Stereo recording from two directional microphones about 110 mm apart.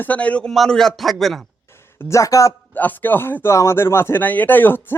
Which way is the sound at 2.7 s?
15° left (ahead or behind).